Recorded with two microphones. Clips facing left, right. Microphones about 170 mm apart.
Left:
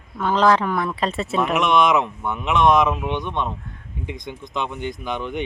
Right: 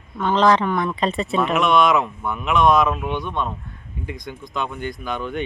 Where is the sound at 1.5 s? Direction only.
20° left (ahead or behind).